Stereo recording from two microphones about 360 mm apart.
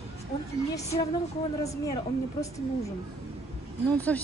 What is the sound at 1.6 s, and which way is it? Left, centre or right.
Speech, centre.